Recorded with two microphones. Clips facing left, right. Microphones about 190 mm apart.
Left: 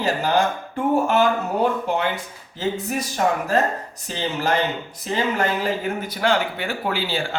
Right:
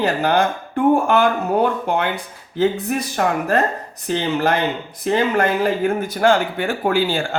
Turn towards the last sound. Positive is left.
turn(degrees=-50)  # may be behind; listen again after turning